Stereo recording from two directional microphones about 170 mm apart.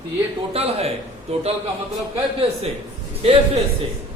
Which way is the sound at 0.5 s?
35° right (ahead or behind).